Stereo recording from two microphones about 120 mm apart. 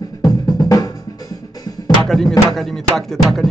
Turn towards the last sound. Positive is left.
turn(degrees=0)  # may be behind; listen again after turning